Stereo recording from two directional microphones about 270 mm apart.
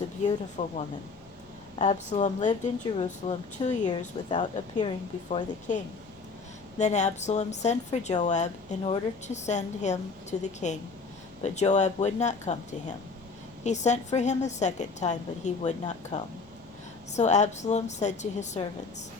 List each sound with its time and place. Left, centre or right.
0.6 s speech: left
1.8 s speech: left
5.3 s speech: left
13.7 s speech: left